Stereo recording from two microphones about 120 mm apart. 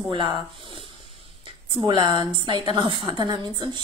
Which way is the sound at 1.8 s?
40° right (ahead or behind).